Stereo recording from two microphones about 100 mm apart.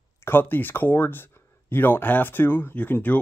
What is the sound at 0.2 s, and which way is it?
Speech, 20° left (ahead or behind).